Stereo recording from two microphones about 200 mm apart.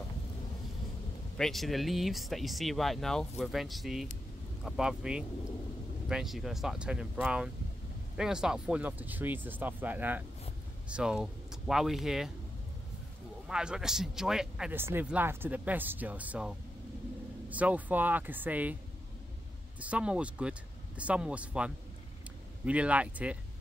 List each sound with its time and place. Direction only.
1.3 s speech: centre (ahead or behind)
13.5 s speech: 5° right (ahead or behind)
19.8 s speech: 5° right (ahead or behind)